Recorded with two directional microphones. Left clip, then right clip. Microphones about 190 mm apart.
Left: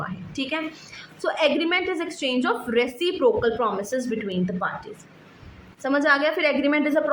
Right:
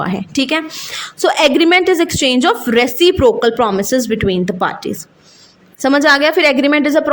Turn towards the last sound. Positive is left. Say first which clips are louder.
# right 9 dB
turn(degrees=-40)  # may be behind; listen again after turning